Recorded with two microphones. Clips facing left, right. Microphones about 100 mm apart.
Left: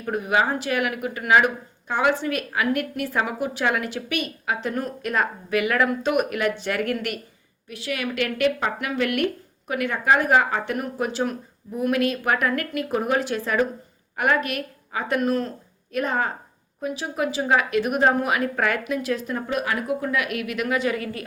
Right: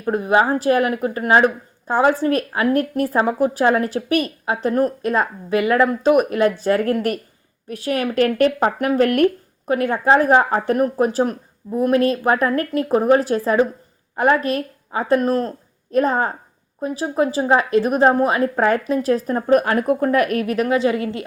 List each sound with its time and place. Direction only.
0.0 s a woman's voice: 30° right (ahead or behind)